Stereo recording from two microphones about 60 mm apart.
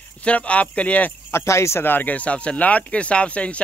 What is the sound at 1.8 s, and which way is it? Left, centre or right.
Speech, left.